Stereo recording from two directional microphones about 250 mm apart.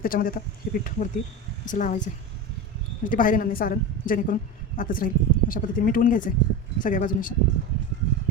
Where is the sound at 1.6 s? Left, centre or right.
Left.